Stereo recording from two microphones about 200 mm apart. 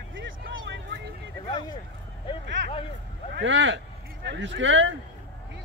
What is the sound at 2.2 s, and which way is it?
Speech, 25° left (ahead or behind).